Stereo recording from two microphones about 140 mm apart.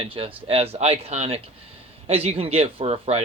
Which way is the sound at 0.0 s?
40° right (ahead or behind).